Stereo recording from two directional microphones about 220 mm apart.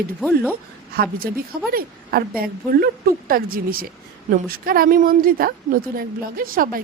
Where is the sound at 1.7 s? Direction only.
45° right (ahead or behind).